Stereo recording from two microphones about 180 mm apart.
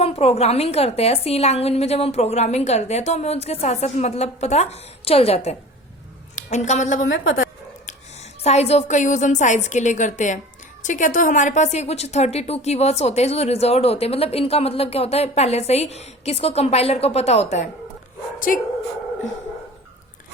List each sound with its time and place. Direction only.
0.0 s a woman's voice: 35° left (ahead or behind)
18.5 s speech: 50° left (ahead or behind)